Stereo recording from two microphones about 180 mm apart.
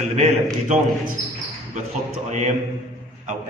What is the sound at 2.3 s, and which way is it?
Speech, 45° right (ahead or behind).